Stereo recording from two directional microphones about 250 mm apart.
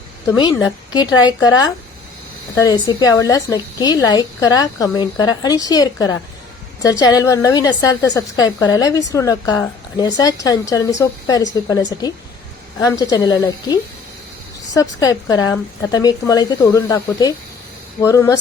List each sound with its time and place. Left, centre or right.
0.3 s a woman's voice: centre